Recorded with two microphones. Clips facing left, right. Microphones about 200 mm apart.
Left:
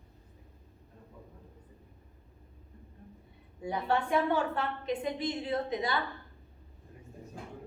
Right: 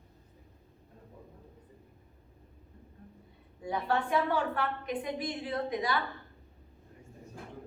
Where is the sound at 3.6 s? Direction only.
25° left (ahead or behind).